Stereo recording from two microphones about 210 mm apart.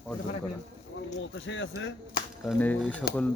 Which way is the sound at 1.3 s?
65° left (ahead or behind).